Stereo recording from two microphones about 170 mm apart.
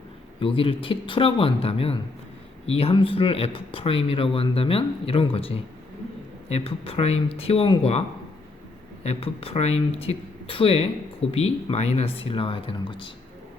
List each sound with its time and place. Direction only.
0.3 s speech: 30° left (ahead or behind)
9.0 s speech: 35° left (ahead or behind)